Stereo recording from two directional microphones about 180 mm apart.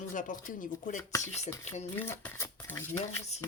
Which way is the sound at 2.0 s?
10° left (ahead or behind).